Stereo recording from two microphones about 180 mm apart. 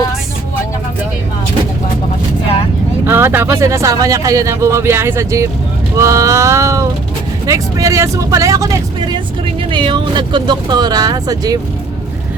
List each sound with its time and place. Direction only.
3.1 s speech: 10° right (ahead or behind)